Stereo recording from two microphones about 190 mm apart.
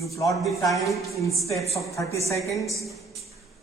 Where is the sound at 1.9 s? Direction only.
15° left (ahead or behind).